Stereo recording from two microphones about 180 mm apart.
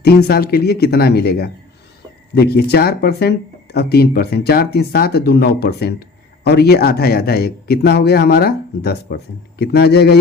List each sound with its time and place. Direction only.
0.0 s speech: 60° left (ahead or behind)